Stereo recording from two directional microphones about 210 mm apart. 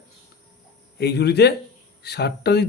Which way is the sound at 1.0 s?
50° left (ahead or behind).